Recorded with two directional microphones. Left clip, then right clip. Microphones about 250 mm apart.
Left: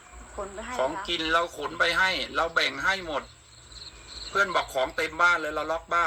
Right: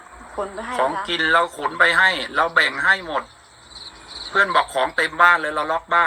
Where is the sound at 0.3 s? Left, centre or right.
Right.